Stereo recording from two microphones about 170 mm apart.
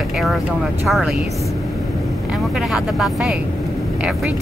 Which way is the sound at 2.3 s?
Centre (ahead or behind).